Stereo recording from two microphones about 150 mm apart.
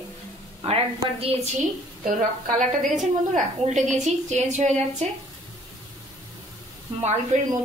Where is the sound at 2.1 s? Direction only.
55° right (ahead or behind).